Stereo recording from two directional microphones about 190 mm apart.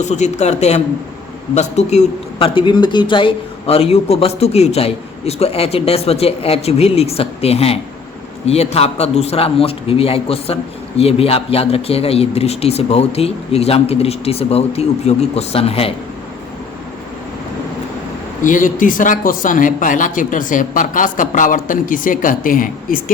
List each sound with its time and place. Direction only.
0.0 s a man's voice: 40° left (ahead or behind)
18.4 s speech: 45° left (ahead or behind)